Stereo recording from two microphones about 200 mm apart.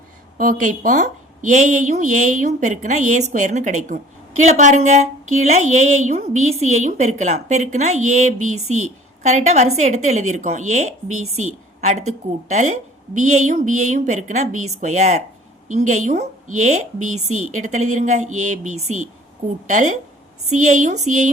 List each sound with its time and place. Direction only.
0.3 s a woman's voice: 40° right (ahead or behind)
11.1 s a woman's voice: 90° right
11.8 s a woman's voice: 35° right (ahead or behind)
17.0 s a woman's voice: 90° right
17.5 s a woman's voice: 35° right (ahead or behind)